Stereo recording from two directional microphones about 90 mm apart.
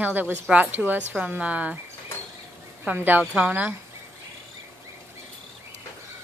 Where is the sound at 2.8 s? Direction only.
20° right (ahead or behind).